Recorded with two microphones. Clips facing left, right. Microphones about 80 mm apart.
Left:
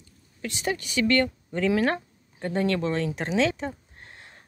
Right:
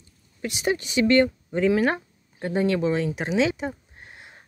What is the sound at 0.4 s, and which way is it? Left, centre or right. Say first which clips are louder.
Speech: right 4 dB; centre.